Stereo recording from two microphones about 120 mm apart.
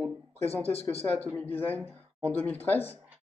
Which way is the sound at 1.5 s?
15° left (ahead or behind).